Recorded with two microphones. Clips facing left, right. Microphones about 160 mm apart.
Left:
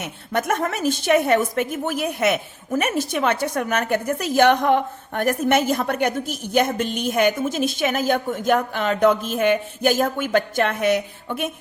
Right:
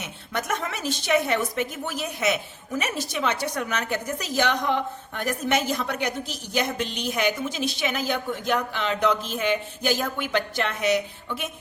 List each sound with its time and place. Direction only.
0.0 s a woman's voice: 55° left (ahead or behind)